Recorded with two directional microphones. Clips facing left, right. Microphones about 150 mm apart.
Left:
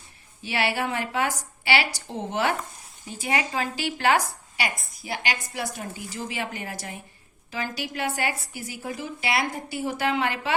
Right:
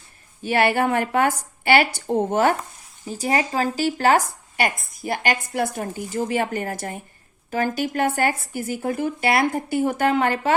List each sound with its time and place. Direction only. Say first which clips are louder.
0.4 s speech: right 7 dB; 50° right (ahead or behind)